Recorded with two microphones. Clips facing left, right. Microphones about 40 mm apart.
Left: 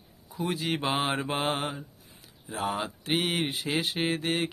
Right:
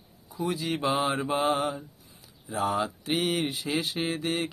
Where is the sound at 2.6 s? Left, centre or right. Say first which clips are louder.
Right 3 dB; left.